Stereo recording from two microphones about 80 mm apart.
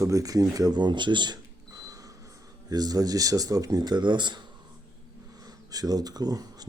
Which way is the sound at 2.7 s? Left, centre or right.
Right.